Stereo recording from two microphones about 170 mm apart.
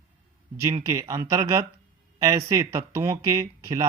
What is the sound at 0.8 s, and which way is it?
Speech, 20° right (ahead or behind).